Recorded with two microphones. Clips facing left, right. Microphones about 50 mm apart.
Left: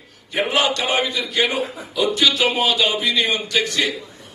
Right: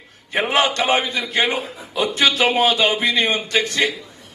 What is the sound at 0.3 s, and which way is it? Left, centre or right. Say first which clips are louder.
A man's voice: right 1 dB; right.